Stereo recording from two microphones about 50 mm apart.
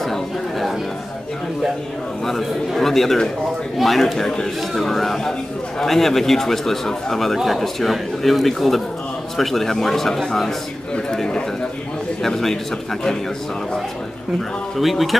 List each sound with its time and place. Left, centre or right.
0.0 s a sound: centre
2.2 s a man's voice: centre
11.1 s speech: centre
14.8 s a man's voice: centre